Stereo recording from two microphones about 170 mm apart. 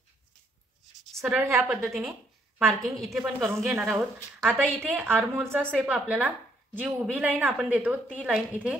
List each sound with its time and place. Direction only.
1.0 s writing: centre (ahead or behind)
1.4 s a woman's voice: 15° right (ahead or behind)
1.7 s speech: centre (ahead or behind)
3.3 s a woman's voice: 10° right (ahead or behind)
3.7 s speech: centre (ahead or behind)
4.9 s a woman's voice: 10° right (ahead or behind)
5.6 s a woman's voice: 5° left (ahead or behind)
5.9 s a woman's voice: 5° right (ahead or behind)